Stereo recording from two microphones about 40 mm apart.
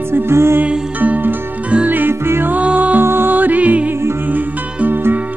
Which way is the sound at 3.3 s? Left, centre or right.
Right.